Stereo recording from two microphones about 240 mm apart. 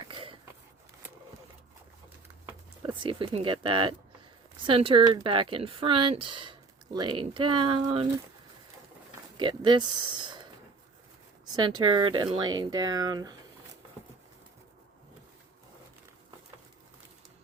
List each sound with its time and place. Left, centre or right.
0.1 s sniff: right
2.8 s speech: right
9.4 s speech: centre
11.8 s speech: centre